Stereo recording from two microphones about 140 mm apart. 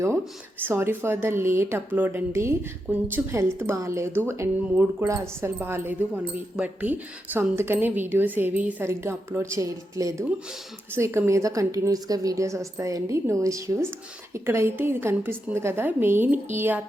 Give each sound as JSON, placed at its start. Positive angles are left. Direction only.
{"t": 0.6, "sound": "a woman's voice", "side_deg": -15}